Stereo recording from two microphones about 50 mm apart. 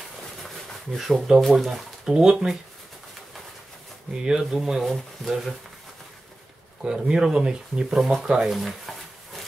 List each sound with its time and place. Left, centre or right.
0.9 s speech: centre
4.1 s speech: centre
6.8 s speech: centre